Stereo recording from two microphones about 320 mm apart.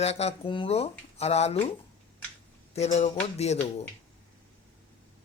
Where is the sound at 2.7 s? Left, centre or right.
Centre.